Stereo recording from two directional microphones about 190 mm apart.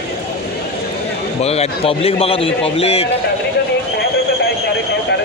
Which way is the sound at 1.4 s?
30° left (ahead or behind).